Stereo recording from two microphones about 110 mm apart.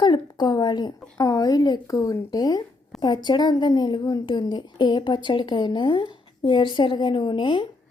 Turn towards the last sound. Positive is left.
turn(degrees=45)  # may be behind; listen again after turning